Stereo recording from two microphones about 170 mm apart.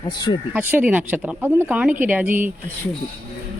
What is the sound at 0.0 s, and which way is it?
Speech, 25° left (ahead or behind).